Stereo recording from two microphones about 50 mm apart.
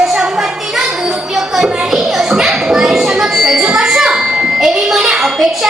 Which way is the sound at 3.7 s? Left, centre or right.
Centre.